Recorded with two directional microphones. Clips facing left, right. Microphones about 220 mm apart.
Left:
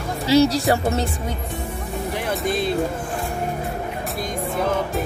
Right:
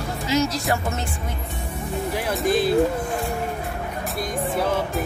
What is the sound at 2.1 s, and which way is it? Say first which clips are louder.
Speech: right 2 dB; centre (ahead or behind).